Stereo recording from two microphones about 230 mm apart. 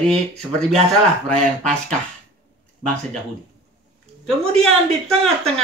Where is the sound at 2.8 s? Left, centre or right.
Centre.